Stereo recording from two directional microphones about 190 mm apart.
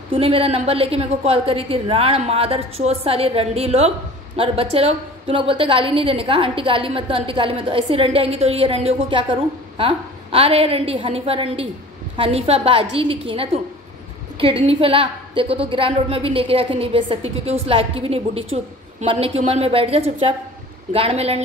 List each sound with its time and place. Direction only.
0.1 s a woman's voice: 30° right (ahead or behind)
14.4 s a woman's voice: 30° right (ahead or behind)